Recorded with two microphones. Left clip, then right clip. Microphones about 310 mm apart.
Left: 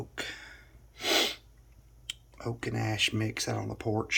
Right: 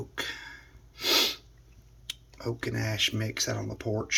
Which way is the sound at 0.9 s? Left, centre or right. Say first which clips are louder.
Right 2 dB; centre.